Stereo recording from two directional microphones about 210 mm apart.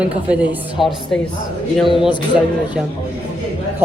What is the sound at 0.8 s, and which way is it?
Speech, centre (ahead or behind).